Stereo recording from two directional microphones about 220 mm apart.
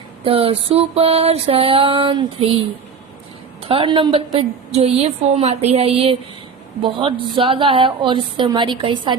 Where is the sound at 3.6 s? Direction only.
25° right (ahead or behind).